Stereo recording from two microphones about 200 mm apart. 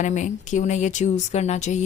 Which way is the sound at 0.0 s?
40° left (ahead or behind).